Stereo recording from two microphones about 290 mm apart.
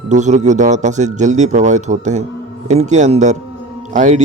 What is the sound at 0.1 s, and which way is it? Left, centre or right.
A man's voice, right.